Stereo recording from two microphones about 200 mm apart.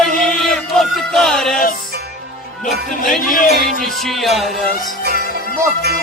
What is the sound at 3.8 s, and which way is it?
Music, centre (ahead or behind).